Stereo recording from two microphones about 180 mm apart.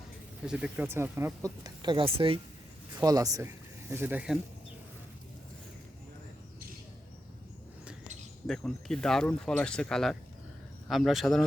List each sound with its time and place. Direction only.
0.4 s speech: 5° right (ahead or behind); by 2.4 s 30° right (ahead or behind)
2.9 s speech: 20° right (ahead or behind)
8.4 s speech: centre (ahead or behind)